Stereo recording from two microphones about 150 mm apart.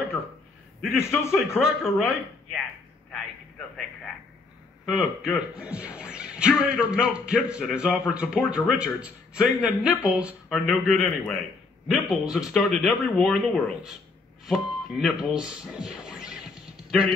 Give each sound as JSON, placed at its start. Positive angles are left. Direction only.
{"t": 0.7, "sound": "a man's voice", "side_deg": 0}
{"t": 3.1, "sound": "a sound", "side_deg": 5}
{"t": 4.8, "sound": "a man's voice", "side_deg": -5}